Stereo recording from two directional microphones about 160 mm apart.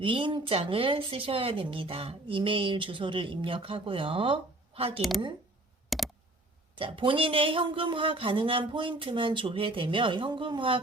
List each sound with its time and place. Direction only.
0.0 s a woman's voice: 30° right (ahead or behind)
5.9 s a sound: centre (ahead or behind)
6.7 s a woman's voice: 35° right (ahead or behind)